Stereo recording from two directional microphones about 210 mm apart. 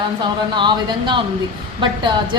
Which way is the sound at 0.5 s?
20° right (ahead or behind).